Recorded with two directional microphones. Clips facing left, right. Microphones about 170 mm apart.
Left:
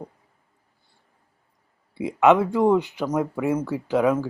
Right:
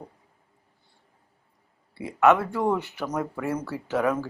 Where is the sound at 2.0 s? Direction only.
20° left (ahead or behind).